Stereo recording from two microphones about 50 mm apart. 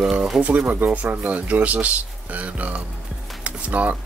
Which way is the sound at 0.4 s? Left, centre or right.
Right.